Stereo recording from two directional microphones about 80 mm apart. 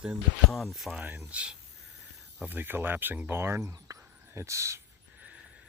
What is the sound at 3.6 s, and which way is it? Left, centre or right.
Speech, right.